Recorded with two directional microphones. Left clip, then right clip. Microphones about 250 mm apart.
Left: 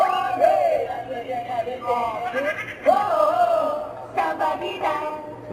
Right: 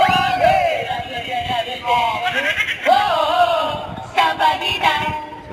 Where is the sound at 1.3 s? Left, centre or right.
Centre.